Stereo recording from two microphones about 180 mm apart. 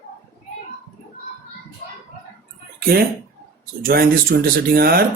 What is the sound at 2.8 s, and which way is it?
Speech, 55° right (ahead or behind).